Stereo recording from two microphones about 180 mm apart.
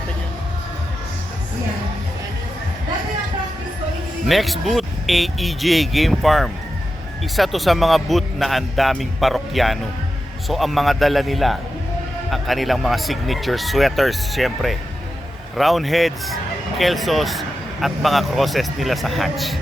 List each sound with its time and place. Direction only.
4.3 s speech: centre (ahead or behind)